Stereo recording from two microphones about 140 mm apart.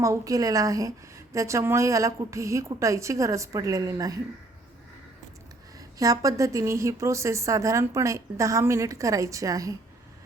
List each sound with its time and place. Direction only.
0.0 s a woman's voice: 25° right (ahead or behind)
6.0 s a woman's voice: 25° right (ahead or behind)